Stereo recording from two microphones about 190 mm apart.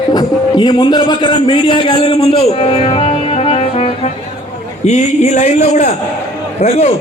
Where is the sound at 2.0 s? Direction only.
30° left (ahead or behind).